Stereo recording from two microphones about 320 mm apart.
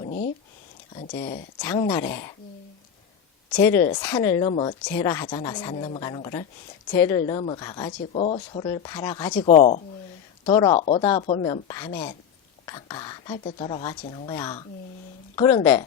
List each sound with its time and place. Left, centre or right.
1.2 s speech: centre
3.5 s speech: centre
3.8 s speech: left
4.0 s speech: centre